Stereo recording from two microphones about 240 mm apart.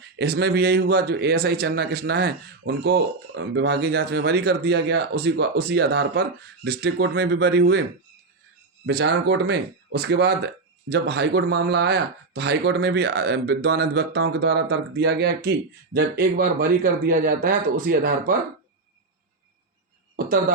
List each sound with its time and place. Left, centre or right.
0.2 s speech: right
8.9 s speech: right
20.1 s speech: right